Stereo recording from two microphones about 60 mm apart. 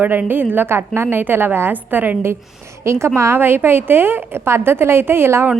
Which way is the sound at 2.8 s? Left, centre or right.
Right.